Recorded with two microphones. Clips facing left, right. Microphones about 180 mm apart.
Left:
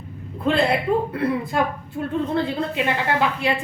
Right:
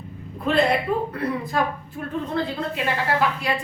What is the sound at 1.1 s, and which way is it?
A woman's voice, 25° left (ahead or behind).